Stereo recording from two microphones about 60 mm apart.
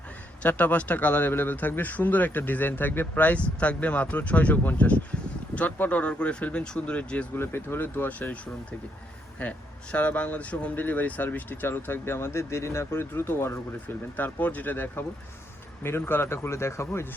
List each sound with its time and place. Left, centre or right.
0.4 s speech: left
7.3 s speech: left
9.4 s speech: left